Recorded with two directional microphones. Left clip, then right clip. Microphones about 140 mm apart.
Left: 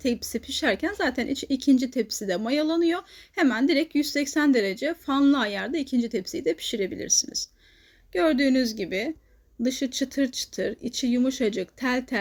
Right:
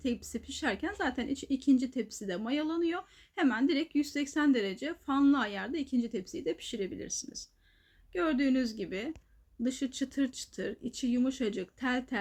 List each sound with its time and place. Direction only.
0.0 s speech: 25° left (ahead or behind)